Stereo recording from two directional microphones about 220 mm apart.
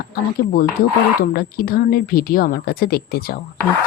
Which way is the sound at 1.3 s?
45° left (ahead or behind).